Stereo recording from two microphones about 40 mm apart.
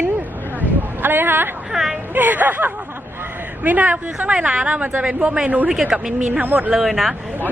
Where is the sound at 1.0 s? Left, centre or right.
Right.